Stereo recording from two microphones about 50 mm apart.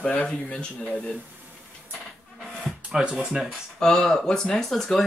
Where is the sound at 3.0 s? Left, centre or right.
Centre.